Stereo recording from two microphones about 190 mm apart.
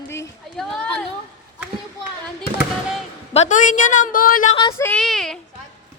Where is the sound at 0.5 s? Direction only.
5° left (ahead or behind).